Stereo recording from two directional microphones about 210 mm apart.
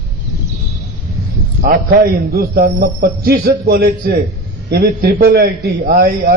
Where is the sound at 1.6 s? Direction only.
45° right (ahead or behind).